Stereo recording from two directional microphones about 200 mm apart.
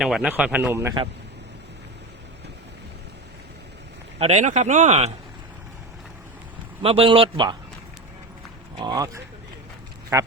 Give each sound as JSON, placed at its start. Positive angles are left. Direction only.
{"t": 0.0, "sound": "speech", "side_deg": -5}
{"t": 4.2, "sound": "speech", "side_deg": -35}
{"t": 6.8, "sound": "a man's voice", "side_deg": -25}
{"t": 8.8, "sound": "a man's voice", "side_deg": -20}